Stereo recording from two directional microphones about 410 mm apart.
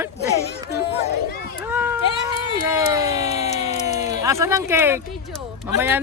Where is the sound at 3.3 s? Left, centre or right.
Centre.